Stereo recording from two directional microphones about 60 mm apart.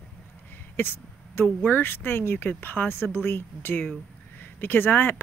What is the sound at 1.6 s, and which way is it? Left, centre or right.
Speech, left.